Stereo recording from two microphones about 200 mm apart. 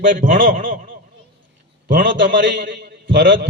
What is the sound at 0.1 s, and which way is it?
Speech, 40° right (ahead or behind).